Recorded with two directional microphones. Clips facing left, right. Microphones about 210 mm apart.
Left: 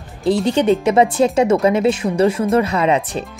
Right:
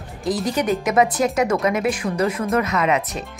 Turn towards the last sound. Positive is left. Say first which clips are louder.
# left 4 dB
turn(degrees=30)  # may be behind; listen again after turning